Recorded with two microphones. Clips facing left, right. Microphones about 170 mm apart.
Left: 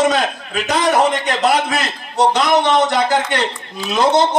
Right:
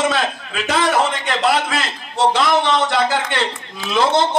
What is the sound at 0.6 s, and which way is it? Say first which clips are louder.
Speech: left 2 dB; 20° left (ahead or behind).